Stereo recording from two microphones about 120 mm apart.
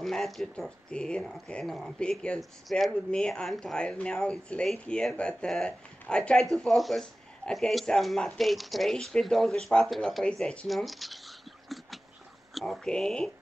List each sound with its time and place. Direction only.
0.0 s speech: centre (ahead or behind)